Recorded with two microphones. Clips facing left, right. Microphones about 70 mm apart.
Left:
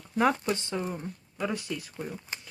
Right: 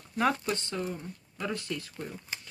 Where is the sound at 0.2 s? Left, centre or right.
Centre.